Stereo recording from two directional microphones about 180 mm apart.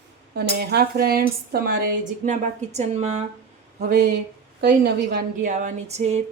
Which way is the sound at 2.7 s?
40° right (ahead or behind).